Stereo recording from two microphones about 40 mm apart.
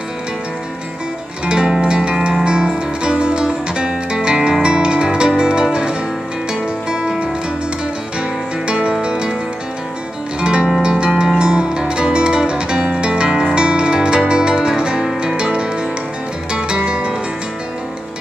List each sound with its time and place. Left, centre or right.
1.4 s music: right
8.2 s music: right
10.4 s music: right